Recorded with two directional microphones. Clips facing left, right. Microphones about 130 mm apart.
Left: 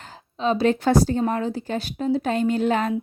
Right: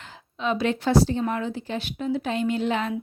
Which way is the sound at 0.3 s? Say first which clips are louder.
Left 4 dB; 35° left (ahead or behind).